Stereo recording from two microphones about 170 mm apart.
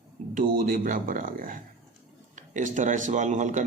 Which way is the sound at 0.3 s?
55° right (ahead or behind).